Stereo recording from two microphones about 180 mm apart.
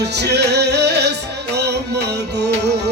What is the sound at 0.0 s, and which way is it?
Music, 70° right (ahead or behind).